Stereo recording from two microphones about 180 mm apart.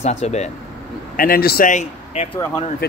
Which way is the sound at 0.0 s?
40° left (ahead or behind).